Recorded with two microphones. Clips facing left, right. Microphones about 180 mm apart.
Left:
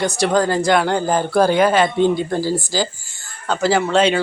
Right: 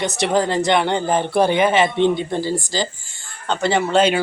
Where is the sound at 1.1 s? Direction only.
25° right (ahead or behind).